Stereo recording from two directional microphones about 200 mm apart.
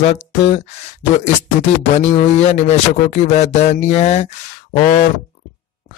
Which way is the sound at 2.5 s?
35° left (ahead or behind).